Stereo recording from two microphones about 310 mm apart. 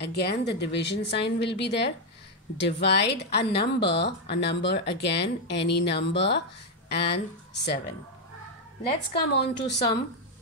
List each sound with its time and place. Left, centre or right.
0.0 s a woman's voice: left
9.1 s a woman's voice: left